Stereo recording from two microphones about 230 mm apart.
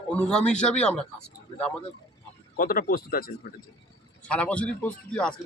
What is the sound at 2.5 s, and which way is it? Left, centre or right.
Speech, left.